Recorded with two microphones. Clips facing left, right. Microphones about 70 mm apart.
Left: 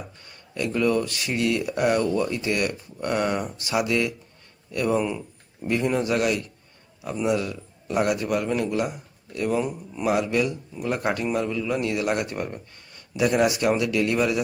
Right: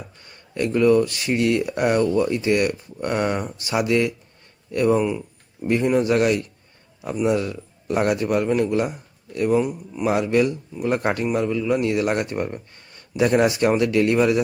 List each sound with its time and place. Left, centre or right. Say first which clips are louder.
0.2 s a sound: right 5 dB; right
0.7 s speech: right 6 dB; right
11.3 s speech: right 4 dB; centre
11.8 s speech: right 3 dB; right